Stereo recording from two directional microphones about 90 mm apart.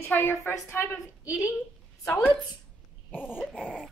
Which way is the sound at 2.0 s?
10° left (ahead or behind).